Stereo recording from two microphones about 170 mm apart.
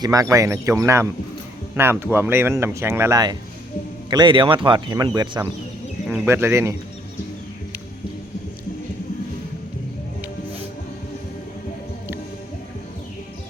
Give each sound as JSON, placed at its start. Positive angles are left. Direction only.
{"t": 0.0, "sound": "speech", "side_deg": -20}
{"t": 6.1, "sound": "speech", "side_deg": -15}